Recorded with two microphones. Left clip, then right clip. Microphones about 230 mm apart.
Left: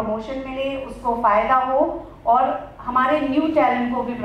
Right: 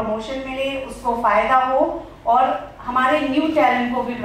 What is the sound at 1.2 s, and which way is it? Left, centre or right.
A woman's voice, centre.